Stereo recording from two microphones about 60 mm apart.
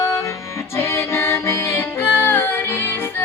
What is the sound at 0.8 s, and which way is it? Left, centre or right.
Music, left.